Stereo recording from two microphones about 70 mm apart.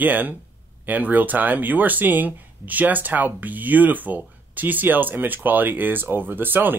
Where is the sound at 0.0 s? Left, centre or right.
Right.